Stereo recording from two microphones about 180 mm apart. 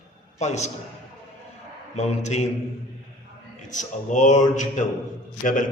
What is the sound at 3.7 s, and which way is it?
A man's voice, 45° left (ahead or behind).